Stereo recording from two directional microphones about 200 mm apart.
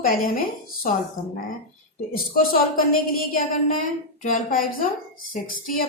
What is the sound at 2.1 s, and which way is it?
A woman's voice, 45° left (ahead or behind).